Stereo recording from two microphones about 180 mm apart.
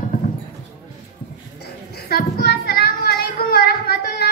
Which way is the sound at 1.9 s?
60° left (ahead or behind).